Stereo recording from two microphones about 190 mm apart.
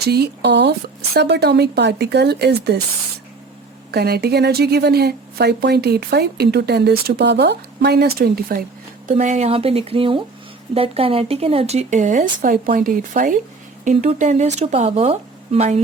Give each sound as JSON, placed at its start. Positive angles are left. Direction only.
{"t": 0.0, "sound": "speech", "side_deg": -60}
{"t": 3.9, "sound": "speech", "side_deg": -55}
{"t": 9.0, "sound": "speech", "side_deg": -40}